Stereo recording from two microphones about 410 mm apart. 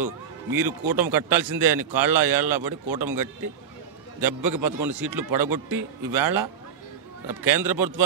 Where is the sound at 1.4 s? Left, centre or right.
Right.